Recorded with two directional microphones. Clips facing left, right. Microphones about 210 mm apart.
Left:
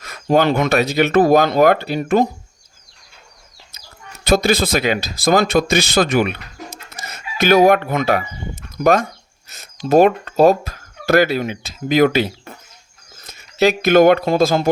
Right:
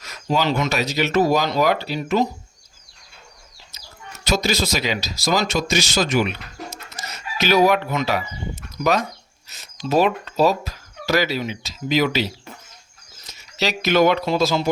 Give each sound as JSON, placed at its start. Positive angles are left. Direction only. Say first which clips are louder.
{"t": 0.0, "sound": "speech", "louder": "left 6 dB", "side_deg": 55}
{"t": 3.8, "sound": "speech", "louder": "even", "side_deg": 55}